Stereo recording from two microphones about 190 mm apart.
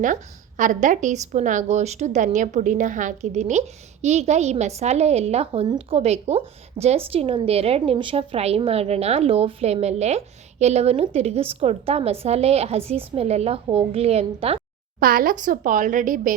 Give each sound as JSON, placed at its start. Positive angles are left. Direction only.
{"t": 0.0, "sound": "a woman's voice", "side_deg": -45}
{"t": 14.9, "sound": "speech", "side_deg": -50}